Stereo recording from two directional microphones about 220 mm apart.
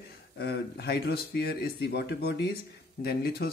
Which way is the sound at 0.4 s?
45° left (ahead or behind).